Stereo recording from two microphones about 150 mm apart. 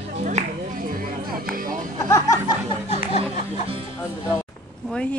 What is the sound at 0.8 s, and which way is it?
Music, 70° right (ahead or behind).